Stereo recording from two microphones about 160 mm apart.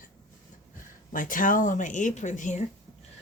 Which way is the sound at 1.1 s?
55° left (ahead or behind).